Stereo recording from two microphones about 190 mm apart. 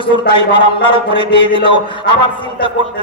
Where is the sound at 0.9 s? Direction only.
25° left (ahead or behind).